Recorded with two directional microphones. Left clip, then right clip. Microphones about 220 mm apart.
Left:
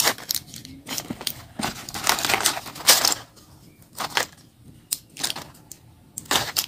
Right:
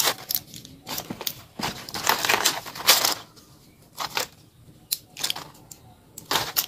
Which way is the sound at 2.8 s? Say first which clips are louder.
Left 1 dB; 10° left (ahead or behind).